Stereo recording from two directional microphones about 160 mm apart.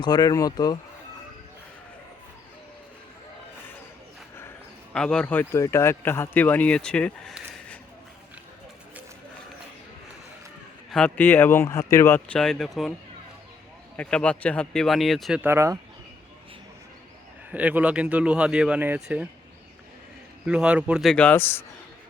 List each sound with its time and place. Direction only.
0.0 s speech: 25° left (ahead or behind)
4.9 s speech: 5° left (ahead or behind)
10.9 s speech: 10° left (ahead or behind)
12.4 s speech: 5° left (ahead or behind)
13.9 s speech: 5° left (ahead or behind)
15.4 s speech: 15° right (ahead or behind)
17.5 s speech: 10° right (ahead or behind)
20.4 s speech: 5° right (ahead or behind); by 21.6 s 15° left (ahead or behind)